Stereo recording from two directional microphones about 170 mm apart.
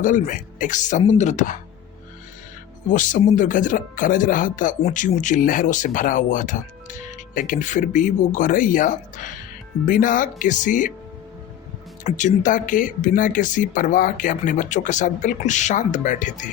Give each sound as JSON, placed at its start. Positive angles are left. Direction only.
{"t": 0.0, "sound": "speech", "side_deg": 50}
{"t": 2.9, "sound": "speech", "side_deg": 50}
{"t": 12.0, "sound": "speech", "side_deg": 45}